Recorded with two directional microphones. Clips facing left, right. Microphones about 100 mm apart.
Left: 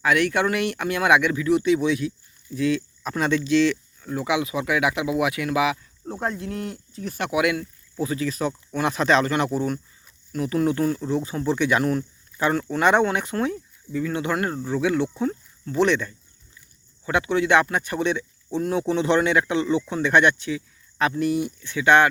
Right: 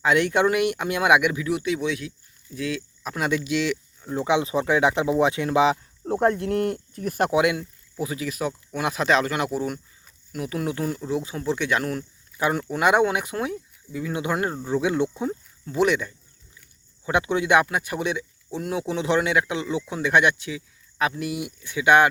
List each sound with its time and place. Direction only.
0.0 s speech: 20° right (ahead or behind)
4.1 s speech: 25° right (ahead or behind)
6.1 s speech: 55° right (ahead or behind)
7.3 s speech: 25° right (ahead or behind); by 12.0 s centre (ahead or behind)
12.4 s speech: 10° right (ahead or behind)